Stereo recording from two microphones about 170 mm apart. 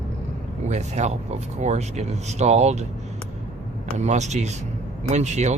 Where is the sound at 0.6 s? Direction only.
45° right (ahead or behind).